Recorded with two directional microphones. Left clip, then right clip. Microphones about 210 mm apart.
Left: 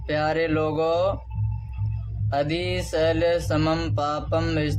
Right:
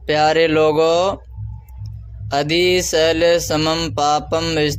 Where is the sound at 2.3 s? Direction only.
40° right (ahead or behind).